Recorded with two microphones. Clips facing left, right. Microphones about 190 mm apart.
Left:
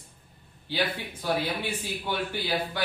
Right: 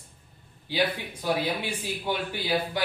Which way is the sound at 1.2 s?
15° right (ahead or behind).